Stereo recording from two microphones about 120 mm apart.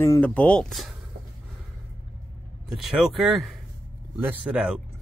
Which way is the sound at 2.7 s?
5° right (ahead or behind).